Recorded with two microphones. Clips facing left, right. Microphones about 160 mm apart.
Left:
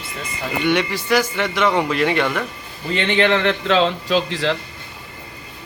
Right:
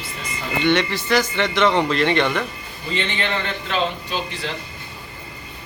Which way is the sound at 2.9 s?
75° left (ahead or behind).